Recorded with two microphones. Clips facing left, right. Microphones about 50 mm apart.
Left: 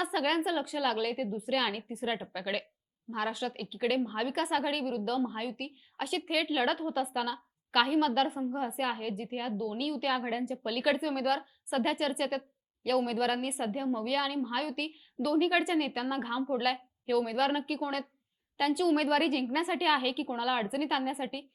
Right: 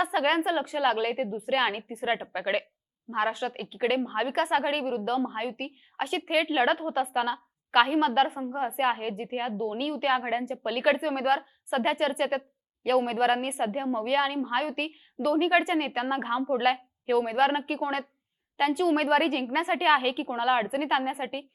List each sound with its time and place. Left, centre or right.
0.0 s a woman's voice: right